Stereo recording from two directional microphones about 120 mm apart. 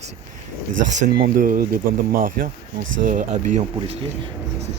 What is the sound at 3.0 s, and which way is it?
Speech, 90° right.